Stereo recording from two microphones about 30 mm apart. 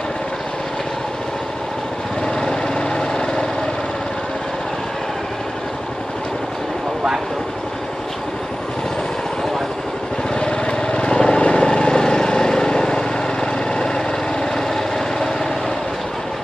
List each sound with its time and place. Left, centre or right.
2.2 s vehicle: left
10.3 s vehicle: left